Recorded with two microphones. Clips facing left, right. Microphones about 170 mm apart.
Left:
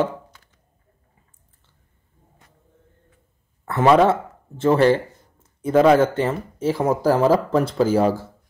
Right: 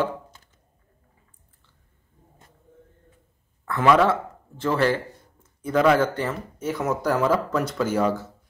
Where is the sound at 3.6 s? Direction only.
25° left (ahead or behind).